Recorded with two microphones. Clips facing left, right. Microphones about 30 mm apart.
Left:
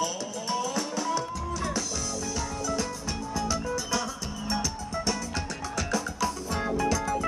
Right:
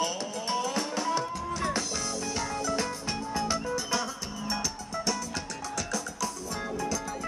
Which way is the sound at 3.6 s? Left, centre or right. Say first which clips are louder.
Left 1 dB; centre.